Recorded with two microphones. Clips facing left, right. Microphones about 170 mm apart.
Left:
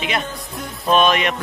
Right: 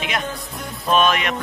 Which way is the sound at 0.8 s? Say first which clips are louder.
Left 2 dB; centre (ahead or behind).